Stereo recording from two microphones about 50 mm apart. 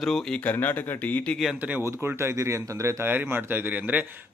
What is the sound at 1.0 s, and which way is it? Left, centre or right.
Speech, left.